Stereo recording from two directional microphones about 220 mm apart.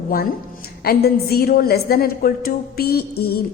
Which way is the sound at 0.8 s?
45° left (ahead or behind).